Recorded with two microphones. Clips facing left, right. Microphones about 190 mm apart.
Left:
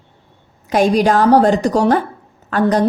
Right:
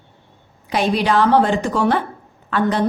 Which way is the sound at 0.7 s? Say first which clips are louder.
Left 5 dB; 45° left (ahead or behind).